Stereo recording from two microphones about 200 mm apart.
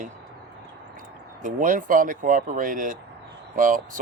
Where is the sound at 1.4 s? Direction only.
40° right (ahead or behind).